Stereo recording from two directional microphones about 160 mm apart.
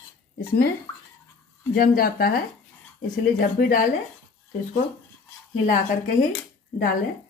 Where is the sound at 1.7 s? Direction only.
65° left (ahead or behind).